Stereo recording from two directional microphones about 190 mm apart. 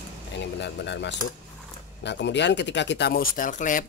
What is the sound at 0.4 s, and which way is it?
Speech, 65° left (ahead or behind).